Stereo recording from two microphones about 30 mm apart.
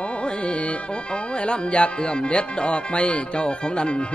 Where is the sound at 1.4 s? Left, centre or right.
Left.